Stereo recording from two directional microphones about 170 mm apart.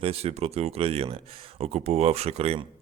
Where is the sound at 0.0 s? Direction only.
35° right (ahead or behind).